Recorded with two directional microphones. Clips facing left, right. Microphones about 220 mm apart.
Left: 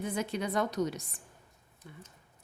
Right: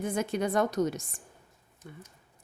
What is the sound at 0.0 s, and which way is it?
A woman's voice, 50° right (ahead or behind).